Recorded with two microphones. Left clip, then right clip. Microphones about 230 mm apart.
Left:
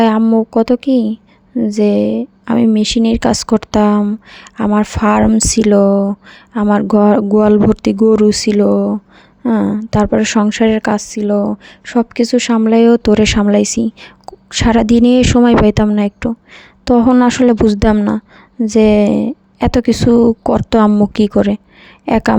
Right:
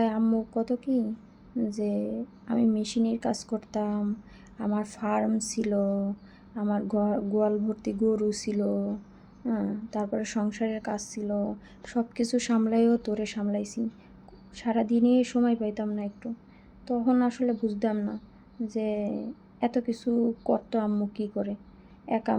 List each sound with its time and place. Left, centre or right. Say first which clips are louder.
0.0 s a woman's voice: left 16 dB; left